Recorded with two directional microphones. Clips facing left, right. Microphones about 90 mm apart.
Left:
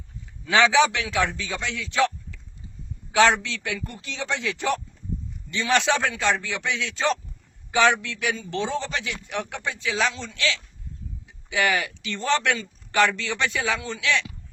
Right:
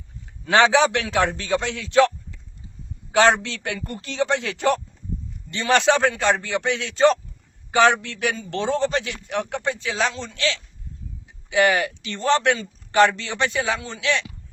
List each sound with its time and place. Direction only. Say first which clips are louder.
0.4 s a man's voice: right 2 dB; 45° right (ahead or behind)
3.1 s a man's voice: right 2 dB; 40° right (ahead or behind)